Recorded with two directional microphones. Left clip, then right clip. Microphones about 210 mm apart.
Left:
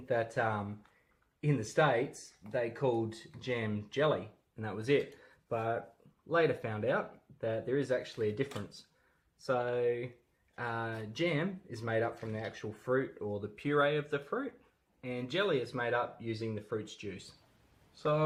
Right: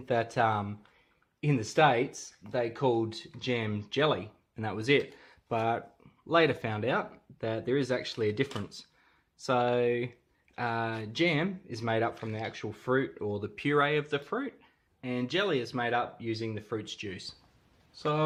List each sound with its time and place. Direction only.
0.0 s speech: 40° right (ahead or behind)
9.5 s speech: 40° right (ahead or behind)